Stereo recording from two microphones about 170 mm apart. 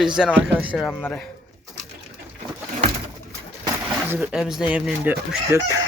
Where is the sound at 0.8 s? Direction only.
10° left (ahead or behind).